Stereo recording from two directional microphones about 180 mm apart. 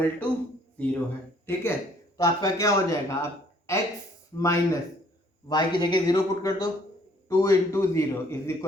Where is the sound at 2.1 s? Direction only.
20° left (ahead or behind).